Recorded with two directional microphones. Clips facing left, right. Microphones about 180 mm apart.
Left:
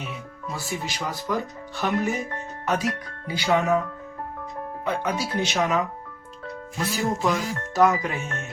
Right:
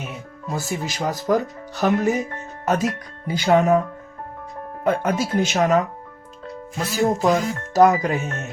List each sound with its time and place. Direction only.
0.5 s speech: 45° right (ahead or behind)
3.2 s speech: 45° right (ahead or behind)
4.8 s speech: 50° right (ahead or behind)
6.9 s speech: 40° right (ahead or behind)